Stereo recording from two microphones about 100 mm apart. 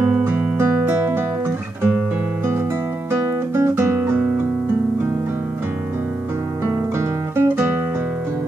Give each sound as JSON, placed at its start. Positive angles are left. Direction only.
{"t": 0.2, "sound": "music", "side_deg": -20}
{"t": 3.1, "sound": "guitar", "side_deg": -25}
{"t": 7.0, "sound": "music", "side_deg": -25}